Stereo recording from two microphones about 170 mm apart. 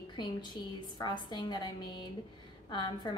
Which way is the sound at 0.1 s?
25° left (ahead or behind).